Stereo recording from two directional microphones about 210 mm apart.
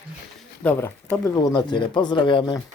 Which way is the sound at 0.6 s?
5° left (ahead or behind).